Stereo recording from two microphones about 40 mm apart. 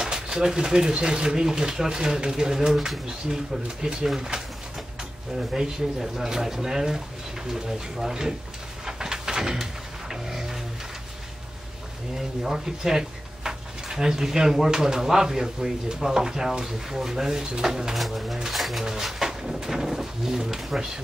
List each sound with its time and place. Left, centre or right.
0.0 s speech: centre
8.8 s a sound: centre
12.4 s speech: centre
17.9 s speech: centre